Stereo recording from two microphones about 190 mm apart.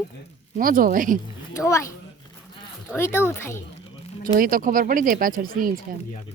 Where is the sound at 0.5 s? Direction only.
50° right (ahead or behind).